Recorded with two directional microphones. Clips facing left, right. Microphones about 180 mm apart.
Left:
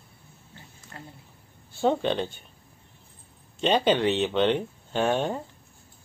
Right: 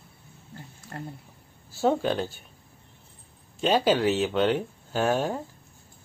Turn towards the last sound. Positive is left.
turn(degrees=-5)  # may be behind; listen again after turning